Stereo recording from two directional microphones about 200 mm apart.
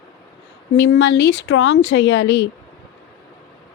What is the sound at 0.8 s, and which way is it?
Speech, 60° left (ahead or behind).